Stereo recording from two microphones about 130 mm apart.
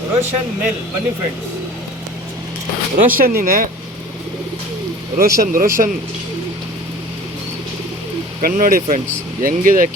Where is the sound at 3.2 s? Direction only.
90° right.